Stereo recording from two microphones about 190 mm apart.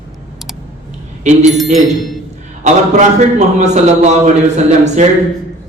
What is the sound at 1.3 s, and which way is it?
Speech, 40° right (ahead or behind).